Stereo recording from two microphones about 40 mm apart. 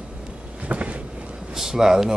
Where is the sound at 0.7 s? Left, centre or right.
Right.